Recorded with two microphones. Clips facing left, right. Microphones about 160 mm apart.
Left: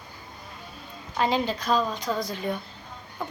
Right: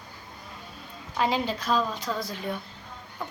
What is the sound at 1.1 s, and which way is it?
A woman's voice, 5° right (ahead or behind).